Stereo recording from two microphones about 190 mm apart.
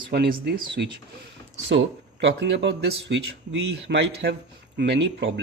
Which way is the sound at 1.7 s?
75° right (ahead or behind).